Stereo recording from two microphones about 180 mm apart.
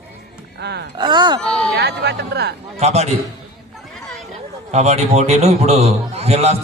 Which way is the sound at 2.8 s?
35° right (ahead or behind).